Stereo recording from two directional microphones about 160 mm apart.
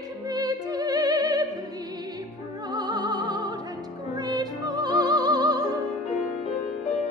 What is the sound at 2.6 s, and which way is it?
Music, 25° right (ahead or behind).